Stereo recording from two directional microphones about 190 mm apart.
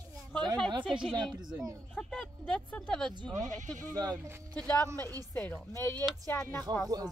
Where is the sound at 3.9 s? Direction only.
20° right (ahead or behind).